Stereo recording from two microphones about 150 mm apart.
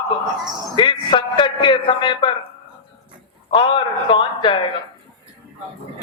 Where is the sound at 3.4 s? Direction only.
35° left (ahead or behind).